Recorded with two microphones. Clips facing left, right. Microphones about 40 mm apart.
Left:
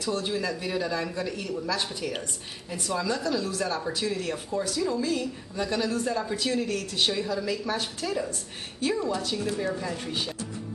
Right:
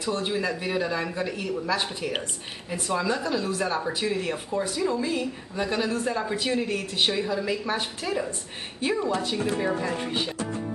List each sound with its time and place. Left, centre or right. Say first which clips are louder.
0.0 s speech: right 2 dB; right